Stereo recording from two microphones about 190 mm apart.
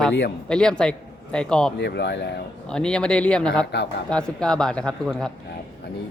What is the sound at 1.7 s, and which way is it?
Speech, 60° left (ahead or behind).